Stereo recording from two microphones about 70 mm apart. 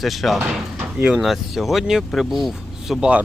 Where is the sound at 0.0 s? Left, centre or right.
Centre.